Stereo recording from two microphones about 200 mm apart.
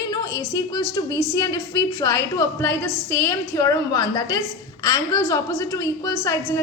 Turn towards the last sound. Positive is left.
turn(degrees=15)  # may be behind; listen again after turning